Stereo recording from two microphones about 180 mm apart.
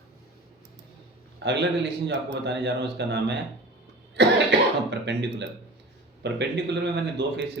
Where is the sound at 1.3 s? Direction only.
75° right (ahead or behind).